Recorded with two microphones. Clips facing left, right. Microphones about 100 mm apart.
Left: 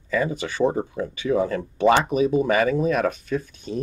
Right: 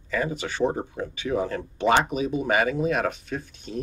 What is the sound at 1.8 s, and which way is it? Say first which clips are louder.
Speech: left 4 dB; 45° left (ahead or behind).